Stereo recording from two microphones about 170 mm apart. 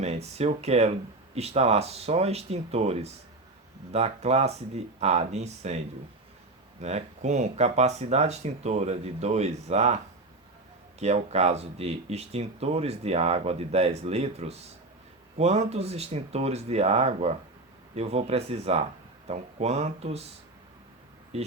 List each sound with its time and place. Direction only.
0.0 s speech: 40° right (ahead or behind)
6.8 s speech: 40° right (ahead or behind)
11.0 s speech: 40° right (ahead or behind)
21.3 s speech: 40° right (ahead or behind)